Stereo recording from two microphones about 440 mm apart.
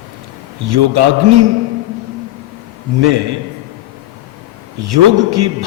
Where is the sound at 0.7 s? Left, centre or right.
Right.